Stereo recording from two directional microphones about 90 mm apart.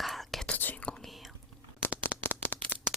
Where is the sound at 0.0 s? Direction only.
Centre (ahead or behind).